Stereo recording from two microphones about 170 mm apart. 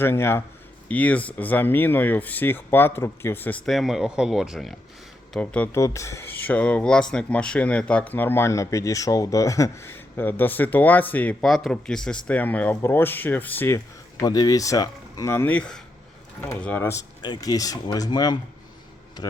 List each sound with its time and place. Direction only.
0.0 s speech: 15° left (ahead or behind)
3.7 s speech: centre (ahead or behind)
17.2 s speech: 25° left (ahead or behind)